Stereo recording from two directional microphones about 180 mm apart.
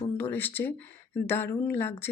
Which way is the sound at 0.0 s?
10° left (ahead or behind).